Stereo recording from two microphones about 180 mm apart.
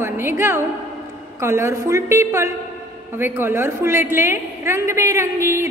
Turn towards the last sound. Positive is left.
turn(degrees=-15)  # may be behind; listen again after turning